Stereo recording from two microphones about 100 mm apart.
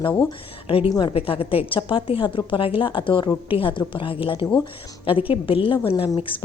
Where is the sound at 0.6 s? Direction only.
70° left (ahead or behind).